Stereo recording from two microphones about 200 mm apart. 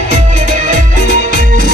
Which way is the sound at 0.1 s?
40° right (ahead or behind).